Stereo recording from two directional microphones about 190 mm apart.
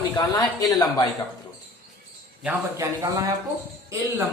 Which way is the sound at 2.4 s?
10° right (ahead or behind).